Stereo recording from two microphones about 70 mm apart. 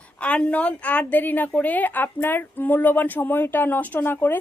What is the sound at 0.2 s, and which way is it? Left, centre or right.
Speech, centre.